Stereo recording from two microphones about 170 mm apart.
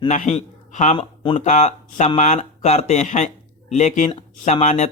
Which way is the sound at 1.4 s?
40° left (ahead or behind).